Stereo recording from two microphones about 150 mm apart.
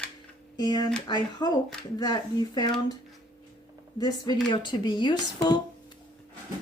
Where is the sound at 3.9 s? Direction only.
25° left (ahead or behind).